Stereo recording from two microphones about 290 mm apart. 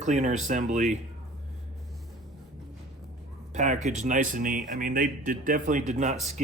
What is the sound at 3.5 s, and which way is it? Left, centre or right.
Speech, right.